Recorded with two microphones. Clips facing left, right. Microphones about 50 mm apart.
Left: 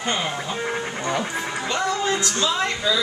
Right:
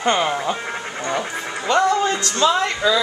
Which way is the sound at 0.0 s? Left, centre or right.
Right.